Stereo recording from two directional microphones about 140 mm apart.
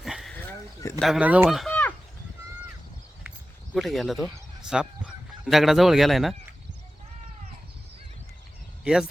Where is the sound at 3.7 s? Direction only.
Centre (ahead or behind).